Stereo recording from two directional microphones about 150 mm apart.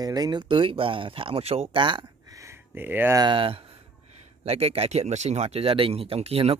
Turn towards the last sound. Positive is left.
turn(degrees=-40)  # may be behind; listen again after turning